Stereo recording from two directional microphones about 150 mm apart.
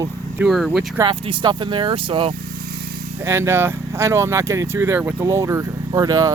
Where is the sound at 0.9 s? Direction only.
30° right (ahead or behind).